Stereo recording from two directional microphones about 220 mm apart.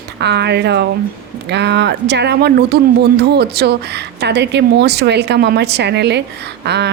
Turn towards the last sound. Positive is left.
turn(degrees=-50)  # may be behind; listen again after turning